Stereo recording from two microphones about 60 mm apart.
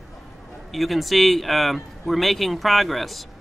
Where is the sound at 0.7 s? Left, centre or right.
Centre.